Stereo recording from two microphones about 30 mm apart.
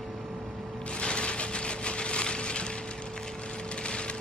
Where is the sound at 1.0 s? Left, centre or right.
Left.